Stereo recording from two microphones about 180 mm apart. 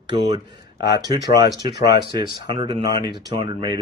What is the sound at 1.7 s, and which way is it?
Speech, 65° left (ahead or behind).